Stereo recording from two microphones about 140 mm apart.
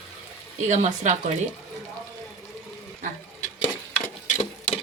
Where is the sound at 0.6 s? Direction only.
55° right (ahead or behind).